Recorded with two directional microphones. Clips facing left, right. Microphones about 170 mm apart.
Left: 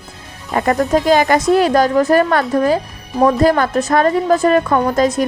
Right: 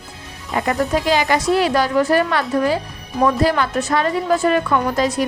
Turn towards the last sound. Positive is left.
turn(degrees=45)  # may be behind; listen again after turning